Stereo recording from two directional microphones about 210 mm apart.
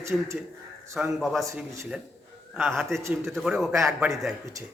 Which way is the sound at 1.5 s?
15° right (ahead or behind).